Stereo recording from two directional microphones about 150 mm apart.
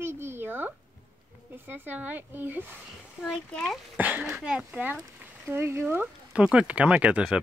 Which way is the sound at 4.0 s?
10° right (ahead or behind).